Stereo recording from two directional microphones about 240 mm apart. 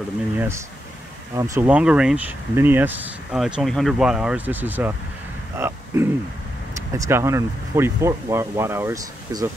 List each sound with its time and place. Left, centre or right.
1.3 s speech: centre